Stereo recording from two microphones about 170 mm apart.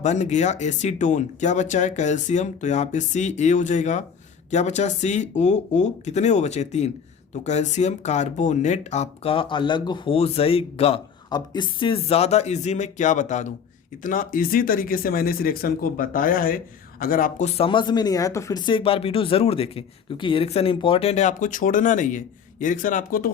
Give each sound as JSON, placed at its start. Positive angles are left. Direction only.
{"t": 0.0, "sound": "speech", "side_deg": 45}
{"t": 17.6, "sound": "speech", "side_deg": 30}